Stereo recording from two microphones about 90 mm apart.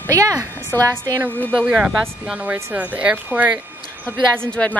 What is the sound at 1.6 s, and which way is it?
A woman's voice, 20° right (ahead or behind).